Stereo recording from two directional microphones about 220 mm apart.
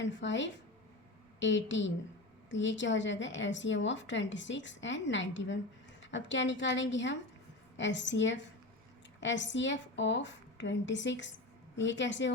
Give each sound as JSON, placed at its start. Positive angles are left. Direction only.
{"t": 0.0, "sound": "a woman's voice", "side_deg": 55}